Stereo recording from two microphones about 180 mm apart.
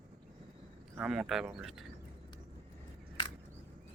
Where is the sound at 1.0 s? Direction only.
Centre (ahead or behind).